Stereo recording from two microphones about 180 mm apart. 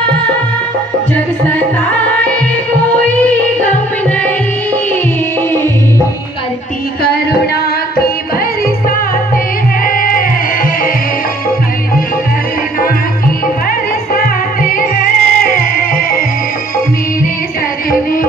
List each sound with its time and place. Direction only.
2.8 s music: 10° left (ahead or behind)
9.8 s music: 50° left (ahead or behind)
14.1 s music: 55° left (ahead or behind)